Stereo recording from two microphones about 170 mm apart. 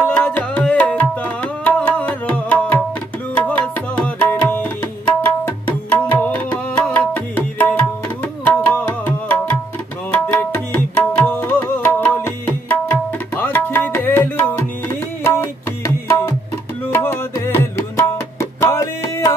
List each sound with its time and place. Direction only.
0.0 s music: 10° left (ahead or behind)
3.3 s tabla: 10° left (ahead or behind)
5.7 s music: 10° left (ahead or behind)
16.9 s tabla: 15° left (ahead or behind)